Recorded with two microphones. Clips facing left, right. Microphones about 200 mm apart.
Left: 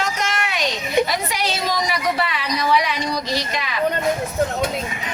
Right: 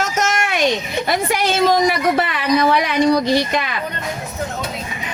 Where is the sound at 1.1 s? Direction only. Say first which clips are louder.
Right 6 dB; 50° right (ahead or behind).